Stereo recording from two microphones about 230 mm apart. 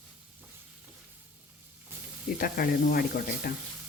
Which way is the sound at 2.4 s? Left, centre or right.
Left.